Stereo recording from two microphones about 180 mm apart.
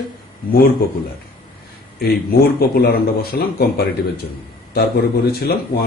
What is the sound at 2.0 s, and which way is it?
Speech, 60° left (ahead or behind).